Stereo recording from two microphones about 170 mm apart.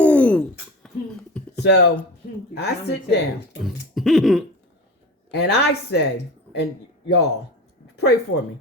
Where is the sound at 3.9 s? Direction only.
Centre (ahead or behind).